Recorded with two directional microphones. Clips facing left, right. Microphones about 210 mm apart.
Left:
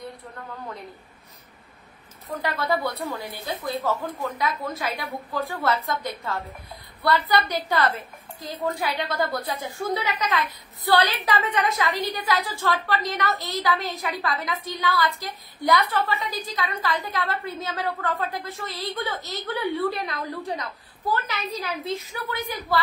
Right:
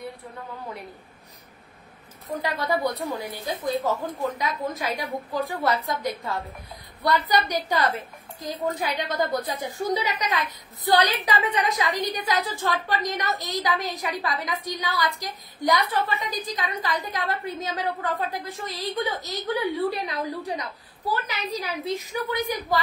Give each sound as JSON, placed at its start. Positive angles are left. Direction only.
{"t": 2.4, "sound": "a woman's voice", "side_deg": -15}